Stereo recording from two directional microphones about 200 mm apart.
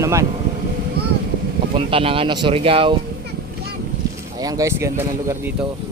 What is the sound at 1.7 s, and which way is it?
Speech, 25° right (ahead or behind).